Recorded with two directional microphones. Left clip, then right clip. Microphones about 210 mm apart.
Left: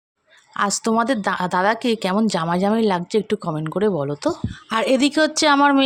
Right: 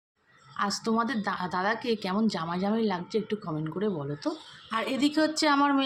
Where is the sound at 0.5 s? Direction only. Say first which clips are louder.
Left 9 dB; 55° left (ahead or behind).